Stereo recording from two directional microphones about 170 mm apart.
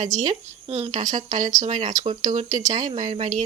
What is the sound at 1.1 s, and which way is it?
A woman's voice, 50° right (ahead or behind).